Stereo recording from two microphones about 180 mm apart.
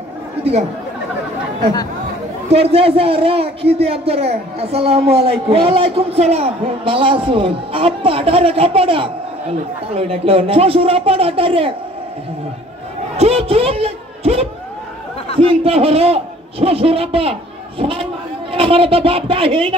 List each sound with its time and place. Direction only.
0.4 s speech: 35° right (ahead or behind)
2.5 s a man's voice: 35° right (ahead or behind)
13.2 s a sound: 35° right (ahead or behind)
15.4 s a man's voice: 30° right (ahead or behind)